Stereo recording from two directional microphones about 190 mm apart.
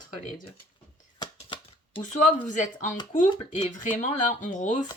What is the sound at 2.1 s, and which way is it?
Speech, 40° left (ahead or behind).